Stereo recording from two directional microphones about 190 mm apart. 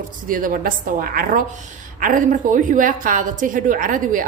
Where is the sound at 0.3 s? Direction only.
45° right (ahead or behind).